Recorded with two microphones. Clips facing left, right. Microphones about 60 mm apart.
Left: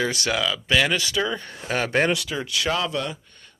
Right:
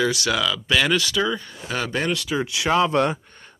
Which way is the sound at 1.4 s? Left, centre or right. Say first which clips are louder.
Left 2 dB; left.